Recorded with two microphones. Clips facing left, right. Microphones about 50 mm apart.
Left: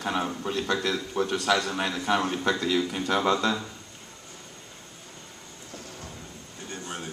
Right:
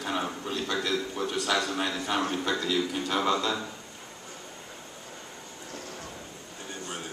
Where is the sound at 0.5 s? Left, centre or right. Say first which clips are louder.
Left 2 dB; left.